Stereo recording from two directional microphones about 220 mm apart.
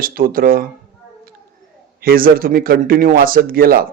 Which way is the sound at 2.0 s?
40° right (ahead or behind).